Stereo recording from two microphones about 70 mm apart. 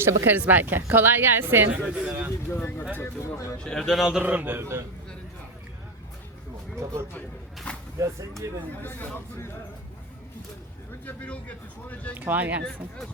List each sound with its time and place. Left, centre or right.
0.0 s a woman's voice: right
1.8 s speech: centre
2.5 s speech: left
3.0 s speech: left
3.6 s a man's voice: centre
4.2 s a man's voice: right
6.7 s speech: right
7.1 s a sound: centre
7.9 s speech: right
8.8 s speech: left
11.0 s speech: left
12.1 s a woman's voice: right